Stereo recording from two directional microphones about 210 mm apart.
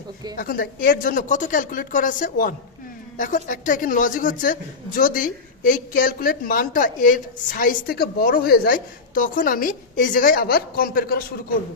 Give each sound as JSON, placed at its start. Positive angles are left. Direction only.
{"t": 0.3, "sound": "a woman's voice", "side_deg": 45}